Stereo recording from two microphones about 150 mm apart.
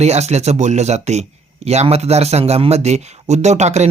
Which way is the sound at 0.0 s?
45° right (ahead or behind).